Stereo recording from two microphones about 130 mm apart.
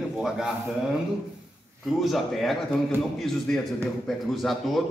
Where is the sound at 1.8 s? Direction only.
Centre (ahead or behind).